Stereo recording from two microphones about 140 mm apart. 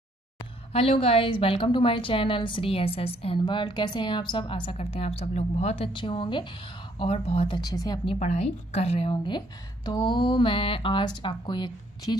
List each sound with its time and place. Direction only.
0.7 s a woman's voice: 45° left (ahead or behind)
5.9 s a woman's voice: 35° left (ahead or behind)
7.0 s a woman's voice: 45° left (ahead or behind); by 8.0 s 25° left (ahead or behind)
8.2 s a woman's voice: 55° left (ahead or behind); by 12.2 s 30° left (ahead or behind)